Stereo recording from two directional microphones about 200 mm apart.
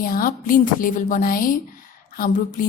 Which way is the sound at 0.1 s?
45° left (ahead or behind).